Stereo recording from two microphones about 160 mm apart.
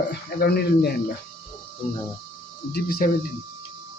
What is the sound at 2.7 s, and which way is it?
Speech, 70° left (ahead or behind).